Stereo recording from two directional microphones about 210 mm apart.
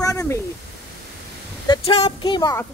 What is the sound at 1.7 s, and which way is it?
Speech, 20° left (ahead or behind).